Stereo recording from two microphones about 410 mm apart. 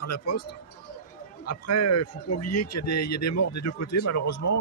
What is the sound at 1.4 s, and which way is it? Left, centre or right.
A man's voice, left.